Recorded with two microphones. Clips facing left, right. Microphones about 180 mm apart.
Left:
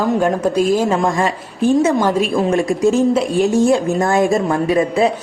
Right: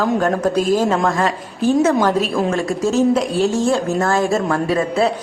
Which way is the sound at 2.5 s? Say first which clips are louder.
Left 4 dB; 15° left (ahead or behind).